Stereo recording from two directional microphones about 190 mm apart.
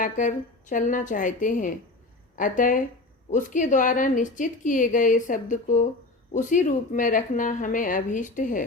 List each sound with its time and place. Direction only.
0.0 s a woman's voice: 40° left (ahead or behind)